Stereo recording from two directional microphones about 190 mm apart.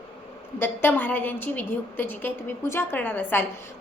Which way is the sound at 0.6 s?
10° left (ahead or behind).